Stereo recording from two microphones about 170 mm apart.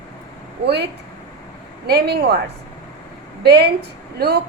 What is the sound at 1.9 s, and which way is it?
Speech, 70° right (ahead or behind).